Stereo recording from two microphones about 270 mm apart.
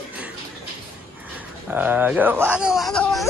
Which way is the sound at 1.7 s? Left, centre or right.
Centre.